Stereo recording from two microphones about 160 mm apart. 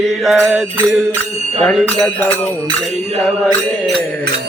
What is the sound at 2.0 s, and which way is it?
Music, 10° left (ahead or behind).